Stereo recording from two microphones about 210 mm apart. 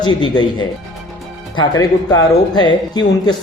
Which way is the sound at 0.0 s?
20° left (ahead or behind).